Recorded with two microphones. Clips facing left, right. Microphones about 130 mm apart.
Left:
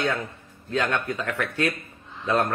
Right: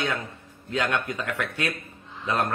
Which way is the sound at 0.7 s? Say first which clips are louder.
Left 1 dB; 15° right (ahead or behind).